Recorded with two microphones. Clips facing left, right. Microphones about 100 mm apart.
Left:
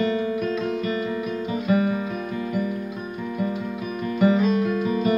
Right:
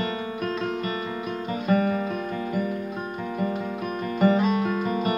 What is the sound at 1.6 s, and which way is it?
Music, 55° right (ahead or behind).